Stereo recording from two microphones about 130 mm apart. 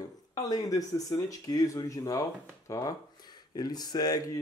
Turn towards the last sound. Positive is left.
turn(degrees=30)  # may be behind; listen again after turning